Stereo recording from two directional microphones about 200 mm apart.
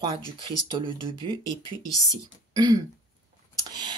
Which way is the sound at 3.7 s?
20° right (ahead or behind).